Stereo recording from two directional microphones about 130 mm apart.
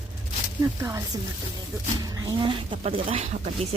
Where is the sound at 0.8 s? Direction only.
25° right (ahead or behind).